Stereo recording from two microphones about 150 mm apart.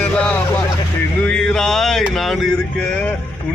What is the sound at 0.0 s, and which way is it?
Vehicle, 10° left (ahead or behind).